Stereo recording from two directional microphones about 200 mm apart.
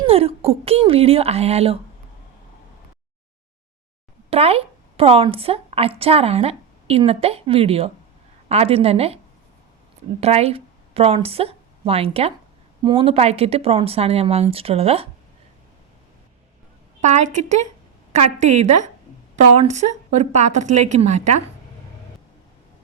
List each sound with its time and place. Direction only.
0.0 s speech: 30° right (ahead or behind)
4.3 s speech: 30° right (ahead or behind)
10.2 s speech: 30° right (ahead or behind)
17.0 s a woman's voice: 35° right (ahead or behind)